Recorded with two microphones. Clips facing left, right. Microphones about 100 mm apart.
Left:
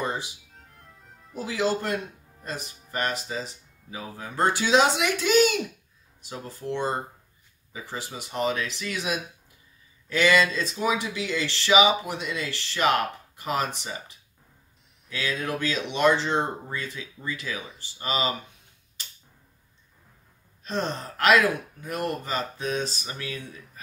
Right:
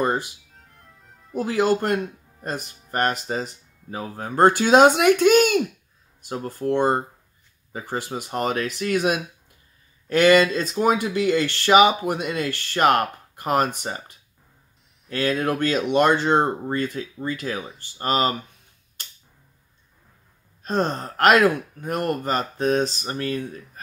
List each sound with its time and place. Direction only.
0.0 s music: 50° right (ahead or behind)
0.5 s music: centre (ahead or behind)
1.4 s speech: 55° right (ahead or behind)
20.6 s speech: 45° right (ahead or behind)